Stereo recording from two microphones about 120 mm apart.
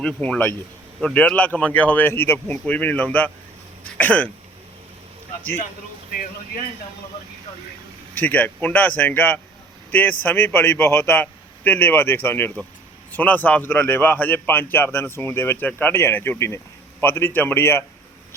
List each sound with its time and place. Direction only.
0.0 s speech: 10° left (ahead or behind)
8.1 s a man's voice: 15° left (ahead or behind)